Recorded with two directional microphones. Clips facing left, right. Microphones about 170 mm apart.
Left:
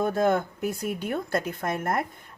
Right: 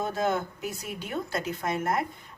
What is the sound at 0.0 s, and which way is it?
Speech, 50° left (ahead or behind).